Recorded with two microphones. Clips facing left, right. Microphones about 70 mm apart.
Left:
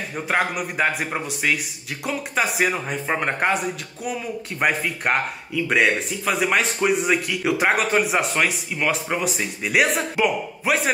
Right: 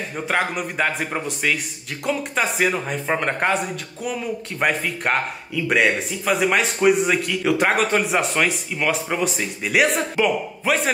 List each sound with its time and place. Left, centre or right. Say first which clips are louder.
0.1 s speech: even; centre